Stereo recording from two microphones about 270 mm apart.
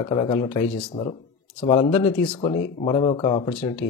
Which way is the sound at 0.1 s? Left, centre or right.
Centre.